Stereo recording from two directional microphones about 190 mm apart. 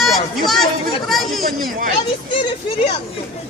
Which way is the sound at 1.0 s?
Centre (ahead or behind).